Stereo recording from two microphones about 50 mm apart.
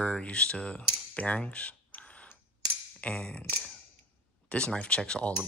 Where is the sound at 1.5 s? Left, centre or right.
Left.